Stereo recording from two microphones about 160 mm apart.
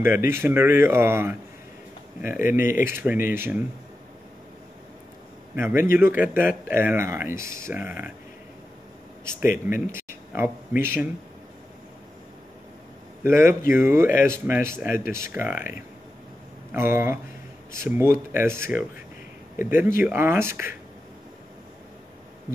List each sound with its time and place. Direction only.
0.0 s a man's voice: 15° right (ahead or behind)
5.6 s a man's voice: 15° right (ahead or behind)
9.2 s speech: 15° right (ahead or behind)
13.2 s a man's voice: 15° right (ahead or behind)
16.7 s a man's voice: 15° right (ahead or behind)